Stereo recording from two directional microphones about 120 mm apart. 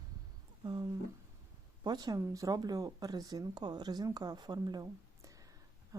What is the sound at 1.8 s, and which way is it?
Speech, 35° right (ahead or behind).